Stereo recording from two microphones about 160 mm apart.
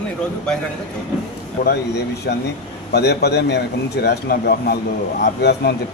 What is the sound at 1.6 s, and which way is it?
A man's voice, 90° left.